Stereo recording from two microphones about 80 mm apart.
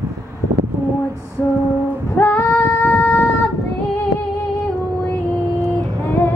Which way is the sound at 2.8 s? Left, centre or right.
Left.